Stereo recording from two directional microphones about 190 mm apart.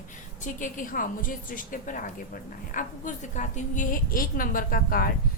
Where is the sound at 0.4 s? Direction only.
45° left (ahead or behind).